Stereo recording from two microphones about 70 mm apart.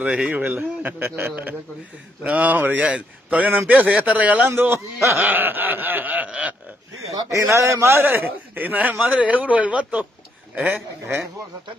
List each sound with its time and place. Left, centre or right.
0.0 s a man's voice: centre
4.5 s a man's voice: right
7.2 s a man's voice: right